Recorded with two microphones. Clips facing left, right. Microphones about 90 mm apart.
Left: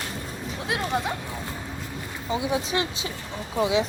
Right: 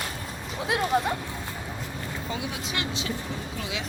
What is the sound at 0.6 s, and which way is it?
Speech, centre (ahead or behind).